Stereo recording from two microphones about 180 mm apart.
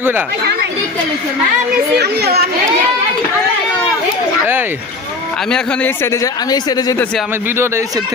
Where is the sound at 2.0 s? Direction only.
65° right (ahead or behind).